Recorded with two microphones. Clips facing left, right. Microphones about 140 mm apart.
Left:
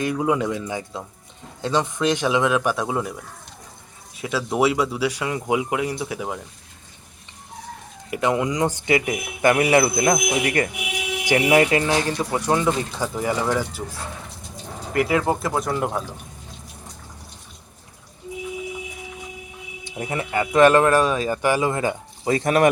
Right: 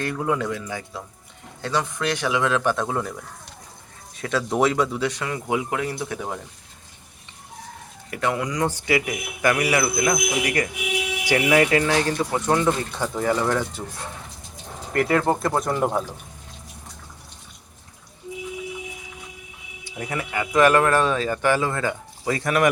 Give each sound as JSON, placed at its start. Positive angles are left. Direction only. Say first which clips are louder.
{"t": 0.0, "sound": "speech", "louder": "left 3 dB", "side_deg": 15}
{"t": 4.2, "sound": "speech", "louder": "even", "side_deg": 5}
{"t": 8.1, "sound": "speech", "louder": "left 3 dB", "side_deg": 20}
{"t": 14.9, "sound": "speech", "louder": "even", "side_deg": 5}
{"t": 19.8, "sound": "speech", "louder": "left 2 dB", "side_deg": 25}
{"t": 20.9, "sound": "speech", "louder": "left 2 dB", "side_deg": 15}